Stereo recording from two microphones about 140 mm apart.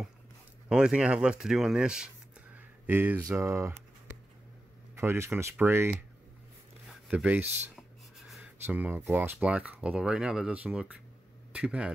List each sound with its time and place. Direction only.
0.7 s speech: 5° right (ahead or behind)
3.3 s a sound: 20° right (ahead or behind)
4.9 s speech: 20° right (ahead or behind)
6.9 s rub: 5° right (ahead or behind)
8.6 s speech: 15° right (ahead or behind)